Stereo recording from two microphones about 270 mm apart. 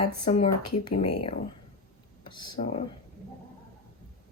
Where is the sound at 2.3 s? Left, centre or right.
Centre.